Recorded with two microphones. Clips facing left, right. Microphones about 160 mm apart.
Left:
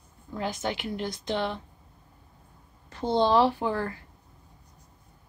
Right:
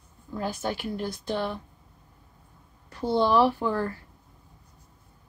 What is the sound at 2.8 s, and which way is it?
Speech, 20° left (ahead or behind).